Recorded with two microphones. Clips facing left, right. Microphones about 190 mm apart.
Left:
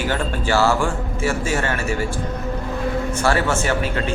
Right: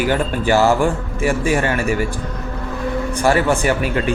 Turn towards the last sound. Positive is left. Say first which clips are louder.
# right 4 dB
turn(degrees=-15)  # may be behind; listen again after turning